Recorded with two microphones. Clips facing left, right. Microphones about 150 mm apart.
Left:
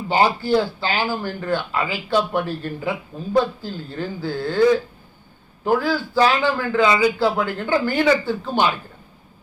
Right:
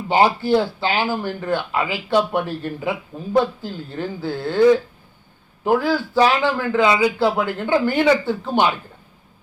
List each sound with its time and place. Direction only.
0.1 s a man's voice: 20° right (ahead or behind)
5.6 s a man's voice: 20° right (ahead or behind)